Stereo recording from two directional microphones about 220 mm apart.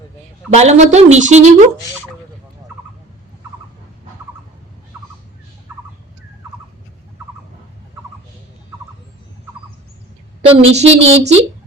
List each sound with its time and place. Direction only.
0.5 s speech: 30° right (ahead or behind)
10.4 s a woman's voice: 25° right (ahead or behind)